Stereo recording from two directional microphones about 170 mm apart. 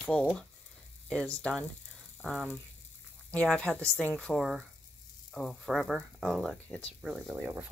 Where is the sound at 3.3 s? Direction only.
5° left (ahead or behind).